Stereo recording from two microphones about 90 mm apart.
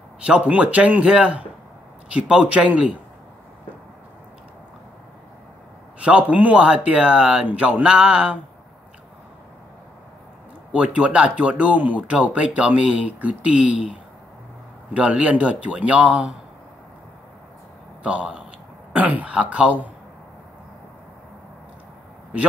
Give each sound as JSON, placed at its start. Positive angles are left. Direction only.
{"t": 0.2, "sound": "speech", "side_deg": -15}
{"t": 5.9, "sound": "speech", "side_deg": -15}
{"t": 10.7, "sound": "speech", "side_deg": -15}
{"t": 15.0, "sound": "speech", "side_deg": -15}
{"t": 18.0, "sound": "speech", "side_deg": -15}